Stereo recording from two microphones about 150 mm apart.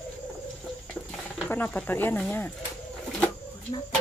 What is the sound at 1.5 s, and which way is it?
Speech, 10° left (ahead or behind).